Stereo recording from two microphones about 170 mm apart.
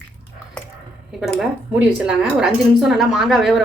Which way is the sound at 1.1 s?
Centre (ahead or behind).